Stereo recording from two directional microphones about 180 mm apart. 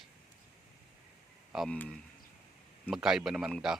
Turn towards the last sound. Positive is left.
turn(degrees=0)  # may be behind; listen again after turning